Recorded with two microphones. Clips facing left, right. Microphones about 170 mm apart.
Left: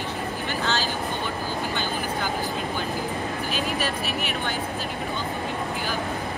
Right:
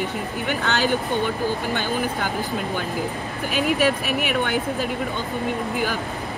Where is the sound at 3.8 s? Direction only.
60° right (ahead or behind).